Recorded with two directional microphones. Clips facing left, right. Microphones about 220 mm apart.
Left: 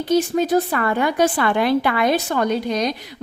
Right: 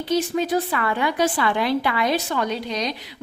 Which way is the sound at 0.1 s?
45° left (ahead or behind).